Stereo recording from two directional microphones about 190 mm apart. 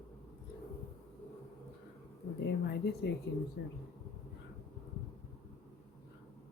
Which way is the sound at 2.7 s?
60° left (ahead or behind).